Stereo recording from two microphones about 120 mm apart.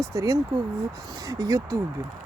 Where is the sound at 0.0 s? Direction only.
30° right (ahead or behind).